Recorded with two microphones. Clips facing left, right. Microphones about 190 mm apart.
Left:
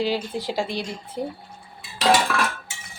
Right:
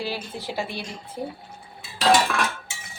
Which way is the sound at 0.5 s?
90° left.